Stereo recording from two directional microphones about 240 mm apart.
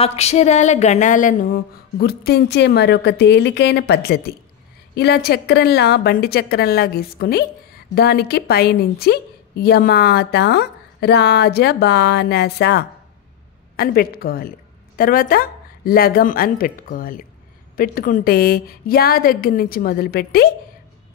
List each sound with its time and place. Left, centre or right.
0.0 s a woman's voice: left